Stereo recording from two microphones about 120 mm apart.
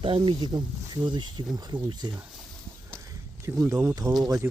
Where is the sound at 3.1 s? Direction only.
25° right (ahead or behind).